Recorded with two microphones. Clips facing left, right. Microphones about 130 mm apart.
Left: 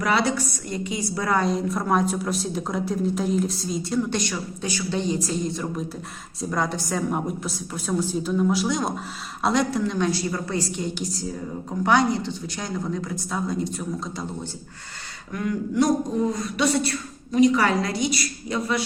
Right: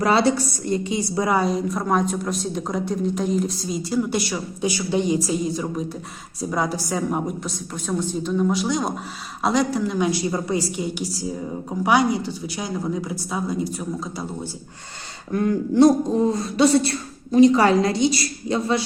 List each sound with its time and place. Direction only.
0.0 s a woman's voice: 30° right (ahead or behind)
1.3 s a woman's voice: 5° right (ahead or behind)
15.3 s a woman's voice: 35° right (ahead or behind)